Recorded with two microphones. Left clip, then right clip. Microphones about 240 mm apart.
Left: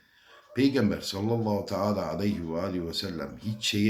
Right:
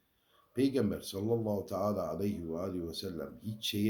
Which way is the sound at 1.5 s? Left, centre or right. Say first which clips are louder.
Left 5 dB; left.